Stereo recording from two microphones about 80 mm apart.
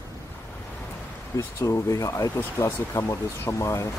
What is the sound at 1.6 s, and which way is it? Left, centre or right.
Speech, left.